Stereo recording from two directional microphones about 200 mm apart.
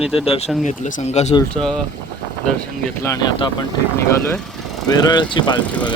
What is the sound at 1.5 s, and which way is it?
Speech, 5° left (ahead or behind).